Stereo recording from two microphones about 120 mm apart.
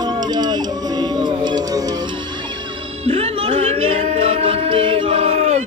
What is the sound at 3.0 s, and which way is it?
Music, 55° right (ahead or behind).